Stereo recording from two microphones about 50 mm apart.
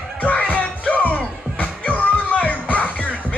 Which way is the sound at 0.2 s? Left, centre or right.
Left.